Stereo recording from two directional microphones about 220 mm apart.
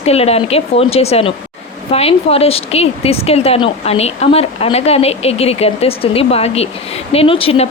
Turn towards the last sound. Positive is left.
turn(degrees=25)  # may be behind; listen again after turning